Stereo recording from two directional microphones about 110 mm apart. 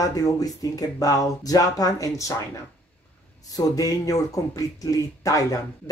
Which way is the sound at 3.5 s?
30° left (ahead or behind).